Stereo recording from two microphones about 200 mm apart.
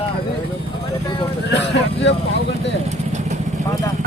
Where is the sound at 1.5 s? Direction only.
60° left (ahead or behind).